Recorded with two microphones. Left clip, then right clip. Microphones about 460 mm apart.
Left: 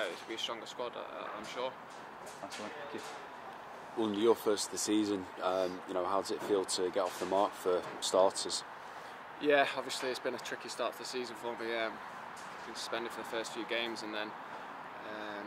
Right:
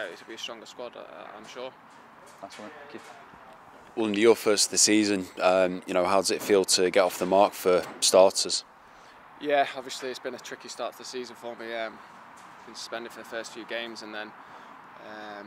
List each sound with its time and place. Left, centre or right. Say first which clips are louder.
0.0 s speech: right 1 dB; right
4.2 s speech: right 9 dB; centre
9.4 s speech: right 4 dB; right
15.0 s a sound: right 3 dB; right